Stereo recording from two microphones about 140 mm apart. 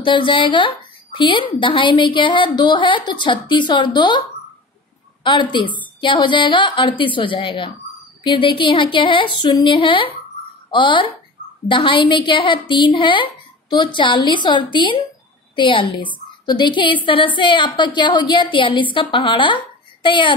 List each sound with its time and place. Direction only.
0.0 s a woman's voice: 35° left (ahead or behind)
5.2 s a woman's voice: 35° left (ahead or behind)